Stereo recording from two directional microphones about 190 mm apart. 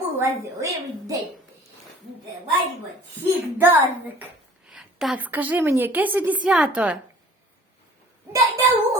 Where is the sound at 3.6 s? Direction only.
10° right (ahead or behind).